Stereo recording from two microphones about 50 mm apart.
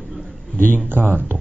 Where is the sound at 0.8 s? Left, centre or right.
Right.